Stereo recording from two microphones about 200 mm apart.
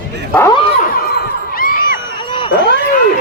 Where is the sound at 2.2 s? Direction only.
25° left (ahead or behind).